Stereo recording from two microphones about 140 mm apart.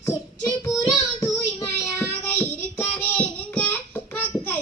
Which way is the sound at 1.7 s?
15° left (ahead or behind).